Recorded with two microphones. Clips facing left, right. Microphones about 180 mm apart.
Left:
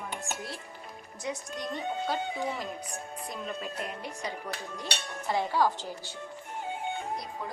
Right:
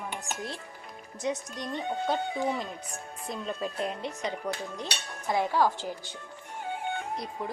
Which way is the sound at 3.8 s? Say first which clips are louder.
Right 4 dB; 25° right (ahead or behind).